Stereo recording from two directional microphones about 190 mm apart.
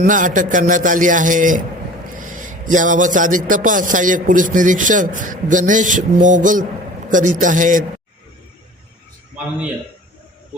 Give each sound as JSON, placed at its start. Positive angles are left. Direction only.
{"t": 0.0, "sound": "a man's voice", "side_deg": -45}